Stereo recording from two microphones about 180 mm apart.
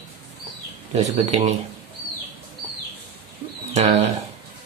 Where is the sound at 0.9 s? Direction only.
35° right (ahead or behind).